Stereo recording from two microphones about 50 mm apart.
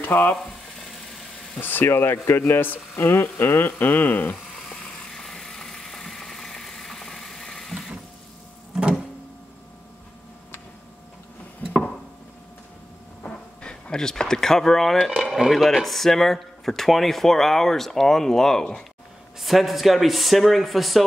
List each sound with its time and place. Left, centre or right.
0.0 s speech: left
1.6 s speech: left
4.6 s vehicle: centre
11.6 s a sound: left
13.6 s speech: centre
19.4 s speech: centre